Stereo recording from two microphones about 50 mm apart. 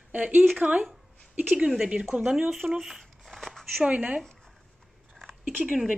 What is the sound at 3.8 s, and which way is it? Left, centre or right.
Speech, right.